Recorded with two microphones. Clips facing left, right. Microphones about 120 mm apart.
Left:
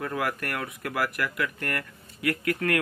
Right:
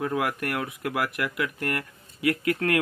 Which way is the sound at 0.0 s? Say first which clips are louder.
Right 3 dB; 10° right (ahead or behind).